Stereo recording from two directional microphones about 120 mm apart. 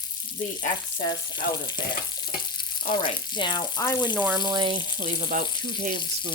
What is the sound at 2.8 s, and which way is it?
Speech, 45° left (ahead or behind).